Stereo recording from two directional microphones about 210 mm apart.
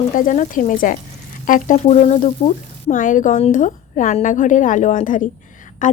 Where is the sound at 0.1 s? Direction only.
40° left (ahead or behind).